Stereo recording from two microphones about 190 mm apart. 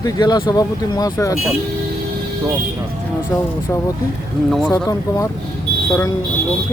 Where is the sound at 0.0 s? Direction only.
20° left (ahead or behind).